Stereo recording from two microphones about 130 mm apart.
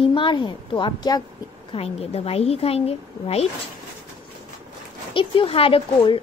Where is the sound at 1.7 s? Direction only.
50° left (ahead or behind).